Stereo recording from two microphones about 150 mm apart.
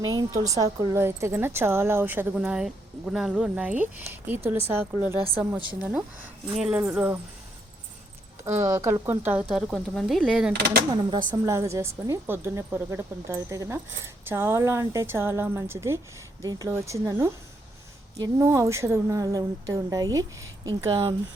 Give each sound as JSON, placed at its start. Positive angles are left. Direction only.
{"t": 0.0, "sound": "a woman's voice", "side_deg": -25}
{"t": 6.6, "sound": "a woman's voice", "side_deg": -10}
{"t": 8.4, "sound": "a woman's voice", "side_deg": -20}
{"t": 10.5, "sound": "speech", "side_deg": -90}
{"t": 11.3, "sound": "a woman's voice", "side_deg": -20}